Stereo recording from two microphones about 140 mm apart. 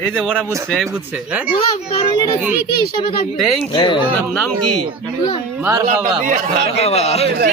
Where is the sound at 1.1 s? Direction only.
10° right (ahead or behind).